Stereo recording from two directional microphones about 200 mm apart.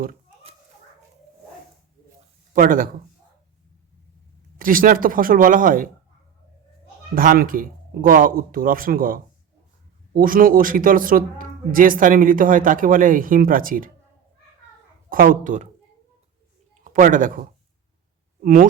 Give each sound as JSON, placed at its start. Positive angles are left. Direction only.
{"t": 2.5, "sound": "speech", "side_deg": -45}
{"t": 4.5, "sound": "a man's voice", "side_deg": -45}
{"t": 7.1, "sound": "a man's voice", "side_deg": -45}
{"t": 15.1, "sound": "speech", "side_deg": -45}
{"t": 16.8, "sound": "speech", "side_deg": -40}
{"t": 18.4, "sound": "a man's voice", "side_deg": -45}